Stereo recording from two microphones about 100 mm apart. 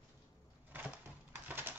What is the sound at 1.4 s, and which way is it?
Bird, 20° right (ahead or behind).